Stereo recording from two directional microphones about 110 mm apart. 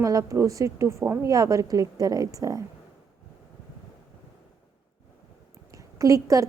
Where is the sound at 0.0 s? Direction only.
30° right (ahead or behind).